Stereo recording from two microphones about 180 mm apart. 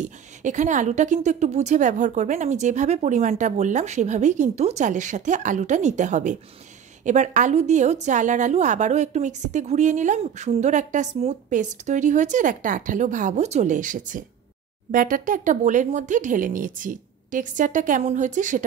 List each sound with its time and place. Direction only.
0.0 s a woman's voice: 45° right (ahead or behind)